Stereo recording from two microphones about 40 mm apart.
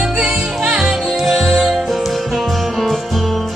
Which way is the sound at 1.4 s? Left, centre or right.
Centre.